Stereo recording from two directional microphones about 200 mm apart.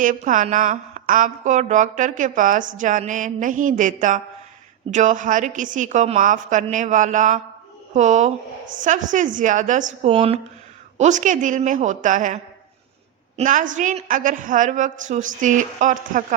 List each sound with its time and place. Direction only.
0.0 s a woman's voice: 40° right (ahead or behind)